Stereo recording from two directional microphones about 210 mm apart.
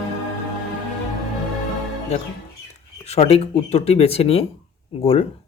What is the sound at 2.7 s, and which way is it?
A man's voice, 30° left (ahead or behind).